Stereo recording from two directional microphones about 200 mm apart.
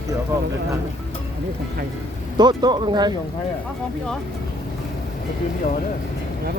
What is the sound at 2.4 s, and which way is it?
Speech, 20° right (ahead or behind).